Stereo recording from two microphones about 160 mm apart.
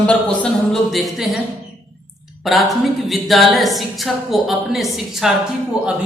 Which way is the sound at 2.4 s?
Centre (ahead or behind).